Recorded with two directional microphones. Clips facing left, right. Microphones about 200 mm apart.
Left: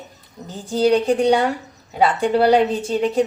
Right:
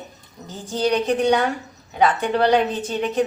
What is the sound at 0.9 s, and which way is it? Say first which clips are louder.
Speech: left 2 dB; 30° left (ahead or behind).